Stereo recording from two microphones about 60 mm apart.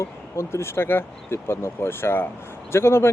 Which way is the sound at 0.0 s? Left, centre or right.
Left.